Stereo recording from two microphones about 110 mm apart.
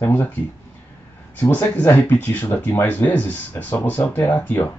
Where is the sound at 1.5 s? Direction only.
20° left (ahead or behind).